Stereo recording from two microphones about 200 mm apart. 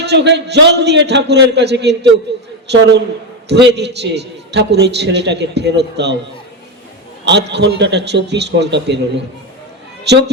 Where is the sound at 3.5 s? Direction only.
60° right (ahead or behind).